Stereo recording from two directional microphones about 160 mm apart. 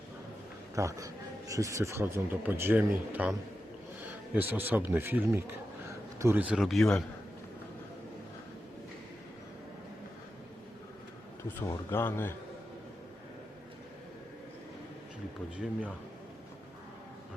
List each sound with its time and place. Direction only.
0.8 s speech: 20° right (ahead or behind)
4.4 s speech: 10° right (ahead or behind)
11.5 s speech: 15° left (ahead or behind)